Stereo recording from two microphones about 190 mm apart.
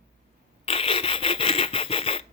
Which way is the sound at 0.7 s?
30° left (ahead or behind).